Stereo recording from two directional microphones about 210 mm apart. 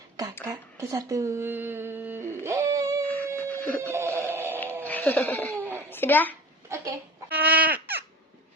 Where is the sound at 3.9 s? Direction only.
10° right (ahead or behind).